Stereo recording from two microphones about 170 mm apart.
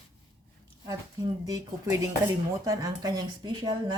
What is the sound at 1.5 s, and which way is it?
Speech, 20° right (ahead or behind).